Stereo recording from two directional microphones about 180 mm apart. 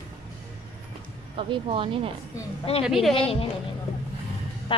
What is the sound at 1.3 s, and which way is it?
Speech, 30° right (ahead or behind).